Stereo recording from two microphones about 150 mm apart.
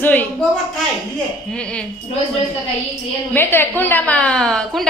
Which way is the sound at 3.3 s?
15° left (ahead or behind).